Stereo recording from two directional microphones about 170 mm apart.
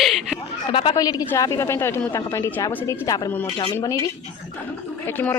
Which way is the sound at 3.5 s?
30° left (ahead or behind).